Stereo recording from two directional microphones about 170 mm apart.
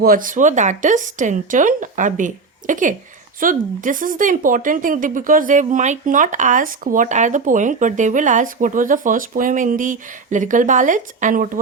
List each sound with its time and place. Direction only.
0.0 s speech: 55° right (ahead or behind)